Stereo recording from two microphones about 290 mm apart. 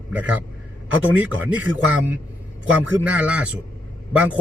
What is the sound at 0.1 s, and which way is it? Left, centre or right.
Speech, centre.